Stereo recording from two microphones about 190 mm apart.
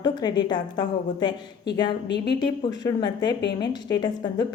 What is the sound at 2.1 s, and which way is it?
Speech, 60° left (ahead or behind).